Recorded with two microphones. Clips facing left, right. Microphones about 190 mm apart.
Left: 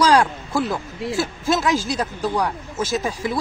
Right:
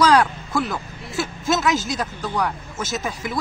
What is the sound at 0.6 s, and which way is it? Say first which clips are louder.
Speech: left 3 dB; 30° left (ahead or behind).